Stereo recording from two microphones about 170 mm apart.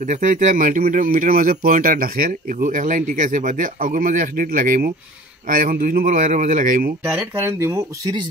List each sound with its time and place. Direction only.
0.0 s speech: 50° right (ahead or behind)
7.1 s speech: 15° right (ahead or behind)